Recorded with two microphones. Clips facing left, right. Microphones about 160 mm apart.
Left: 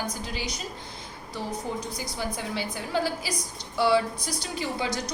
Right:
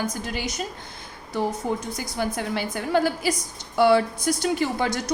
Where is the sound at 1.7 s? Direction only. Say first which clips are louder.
Right 5 dB; 60° right (ahead or behind).